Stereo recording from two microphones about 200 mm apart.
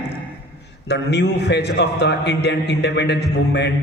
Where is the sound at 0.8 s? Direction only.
60° left (ahead or behind).